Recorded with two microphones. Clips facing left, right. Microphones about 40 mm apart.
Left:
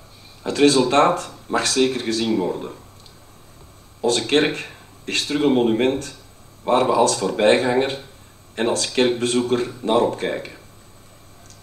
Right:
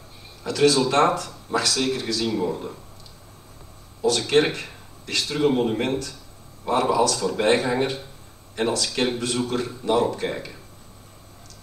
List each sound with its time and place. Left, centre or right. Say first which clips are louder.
0.4 s speech: left 3 dB; left
4.0 s speech: left 1 dB; left